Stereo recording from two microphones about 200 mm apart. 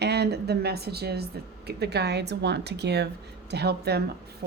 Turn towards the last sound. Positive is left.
turn(degrees=-55)  # may be behind; listen again after turning